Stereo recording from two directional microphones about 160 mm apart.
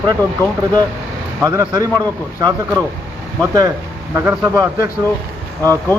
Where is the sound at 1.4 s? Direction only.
20° right (ahead or behind).